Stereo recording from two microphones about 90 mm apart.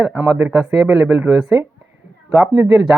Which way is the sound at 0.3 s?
10° right (ahead or behind).